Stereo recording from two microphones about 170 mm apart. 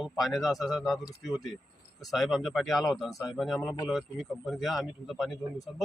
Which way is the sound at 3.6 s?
15° left (ahead or behind).